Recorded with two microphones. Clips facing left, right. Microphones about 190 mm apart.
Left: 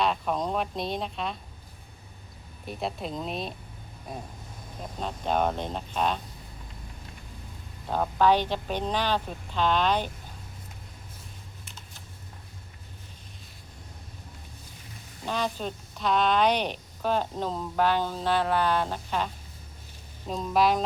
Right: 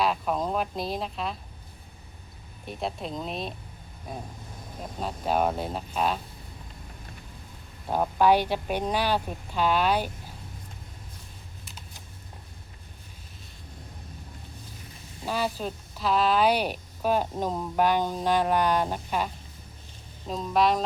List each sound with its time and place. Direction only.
0.0 s speech: 5° right (ahead or behind)
2.6 s speech: centre (ahead or behind)
4.9 s speech: 5° right (ahead or behind)
7.9 s speech: 10° right (ahead or behind)
15.2 s speech: 5° right (ahead or behind)
20.2 s speech: centre (ahead or behind)